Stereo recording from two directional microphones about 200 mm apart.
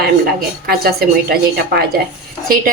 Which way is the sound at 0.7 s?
50° right (ahead or behind).